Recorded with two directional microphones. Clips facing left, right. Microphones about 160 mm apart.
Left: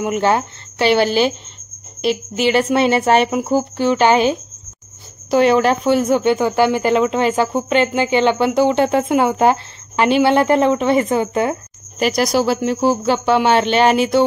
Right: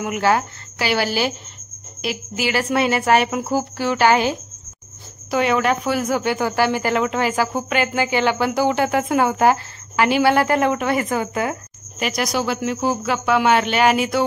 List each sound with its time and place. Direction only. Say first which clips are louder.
0.0 s speech: left 2 dB; 25° left (ahead or behind)
5.3 s speech: left 5 dB; 35° left (ahead or behind)